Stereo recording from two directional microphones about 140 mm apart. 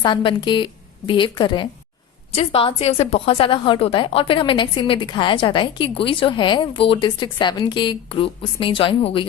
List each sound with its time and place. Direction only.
0.0 s a woman's voice: 35° left (ahead or behind)